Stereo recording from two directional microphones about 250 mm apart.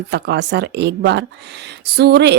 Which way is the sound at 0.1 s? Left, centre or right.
Right.